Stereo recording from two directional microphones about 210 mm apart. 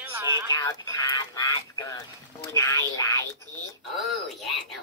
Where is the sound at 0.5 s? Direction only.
15° left (ahead or behind).